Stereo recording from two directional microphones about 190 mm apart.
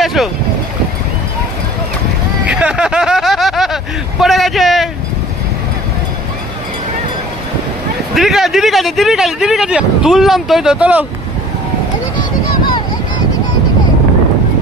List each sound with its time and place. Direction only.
0.0 s boat: centre (ahead or behind)
2.4 s vehicle: 5° right (ahead or behind)
8.1 s speech: centre (ahead or behind)